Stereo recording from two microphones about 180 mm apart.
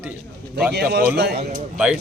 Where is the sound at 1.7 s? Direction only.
5° right (ahead or behind).